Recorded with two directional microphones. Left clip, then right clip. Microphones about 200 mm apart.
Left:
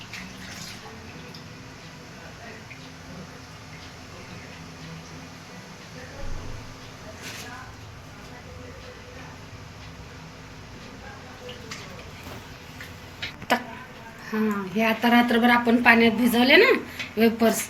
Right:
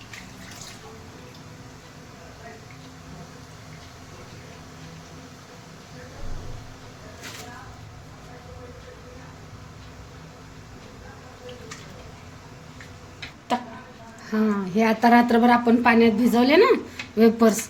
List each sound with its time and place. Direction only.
14.3 s a woman's voice: 55° right (ahead or behind)